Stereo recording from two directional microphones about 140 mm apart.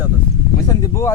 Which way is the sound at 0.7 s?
25° left (ahead or behind).